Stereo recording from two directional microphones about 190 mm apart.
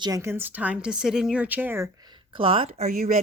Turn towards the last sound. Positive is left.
turn(degrees=-45)  # may be behind; listen again after turning